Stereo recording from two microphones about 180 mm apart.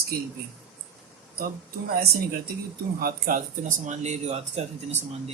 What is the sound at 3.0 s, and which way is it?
Speech, 50° right (ahead or behind).